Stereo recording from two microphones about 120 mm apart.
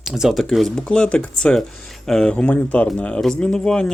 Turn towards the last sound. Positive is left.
turn(degrees=5)  # may be behind; listen again after turning